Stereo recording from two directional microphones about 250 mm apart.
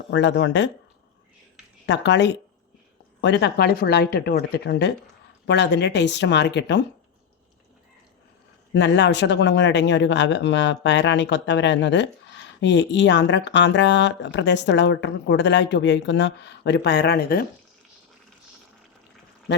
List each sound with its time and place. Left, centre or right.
0.1 s speech: left
1.9 s speech: left
8.7 s speech: left